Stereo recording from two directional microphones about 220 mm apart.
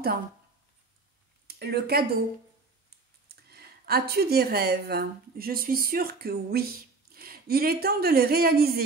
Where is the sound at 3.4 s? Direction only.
45° right (ahead or behind).